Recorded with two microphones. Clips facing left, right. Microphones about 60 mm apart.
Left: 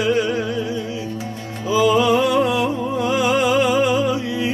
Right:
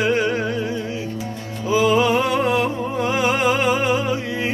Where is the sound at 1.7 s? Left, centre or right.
Right.